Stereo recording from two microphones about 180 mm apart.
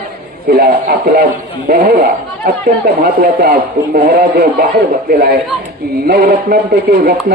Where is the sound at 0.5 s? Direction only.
60° right (ahead or behind).